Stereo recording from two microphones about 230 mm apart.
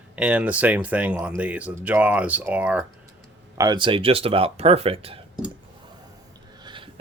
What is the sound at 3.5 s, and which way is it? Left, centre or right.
Speech, centre.